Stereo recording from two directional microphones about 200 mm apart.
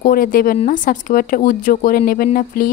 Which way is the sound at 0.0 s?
45° left (ahead or behind).